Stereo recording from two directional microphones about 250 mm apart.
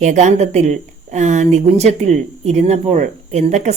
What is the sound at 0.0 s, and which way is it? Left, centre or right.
Speech, right.